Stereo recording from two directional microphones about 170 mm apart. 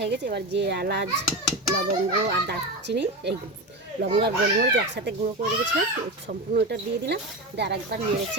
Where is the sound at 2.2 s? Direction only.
80° right.